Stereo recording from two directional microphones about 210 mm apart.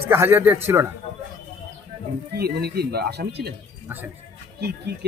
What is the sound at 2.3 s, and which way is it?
Speech, 50° right (ahead or behind).